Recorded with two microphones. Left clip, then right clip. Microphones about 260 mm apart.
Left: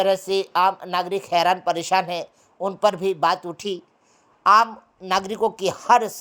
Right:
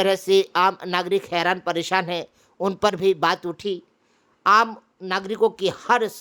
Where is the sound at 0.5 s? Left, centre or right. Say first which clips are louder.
Even; right.